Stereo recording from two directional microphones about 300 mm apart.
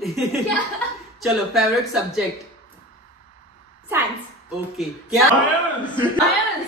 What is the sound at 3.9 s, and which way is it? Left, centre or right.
Speech, centre.